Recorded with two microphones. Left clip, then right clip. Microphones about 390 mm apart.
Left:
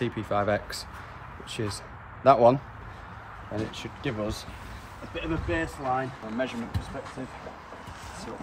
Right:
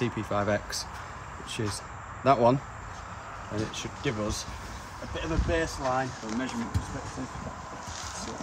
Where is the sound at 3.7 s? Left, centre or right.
Centre.